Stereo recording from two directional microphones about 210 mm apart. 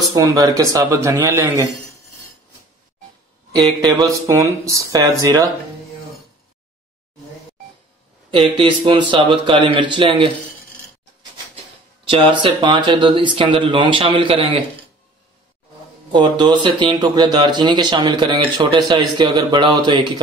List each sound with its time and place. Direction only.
0.0 s speech: 15° right (ahead or behind)
3.8 s speech: 15° right (ahead or behind)
8.3 s speech: 25° right (ahead or behind)
12.1 s speech: 25° right (ahead or behind)
16.1 s speech: 20° right (ahead or behind)